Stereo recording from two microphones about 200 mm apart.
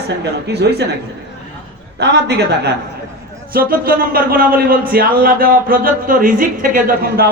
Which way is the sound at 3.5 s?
45° right (ahead or behind).